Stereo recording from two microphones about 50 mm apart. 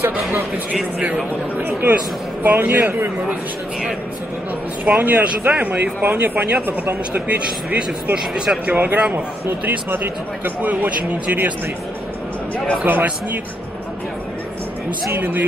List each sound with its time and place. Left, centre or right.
0.9 s speech: right
1.7 s speech: right
2.8 s a man's voice: right
4.8 s speech: right
9.7 s speech: right
12.8 s speech: right
15.1 s speech: right